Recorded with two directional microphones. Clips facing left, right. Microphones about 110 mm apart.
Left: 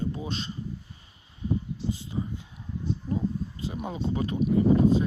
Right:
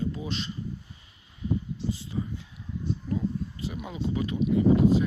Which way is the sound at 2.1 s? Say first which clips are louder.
Even; 20° left (ahead or behind).